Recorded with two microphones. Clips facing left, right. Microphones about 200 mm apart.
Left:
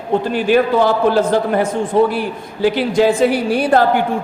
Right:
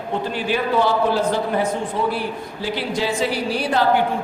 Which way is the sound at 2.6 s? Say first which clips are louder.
Left 10 dB; 50° left (ahead or behind).